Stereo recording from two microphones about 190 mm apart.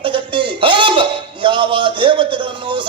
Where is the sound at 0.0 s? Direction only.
25° right (ahead or behind).